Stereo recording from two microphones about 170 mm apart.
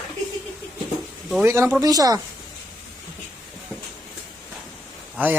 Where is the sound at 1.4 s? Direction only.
15° right (ahead or behind).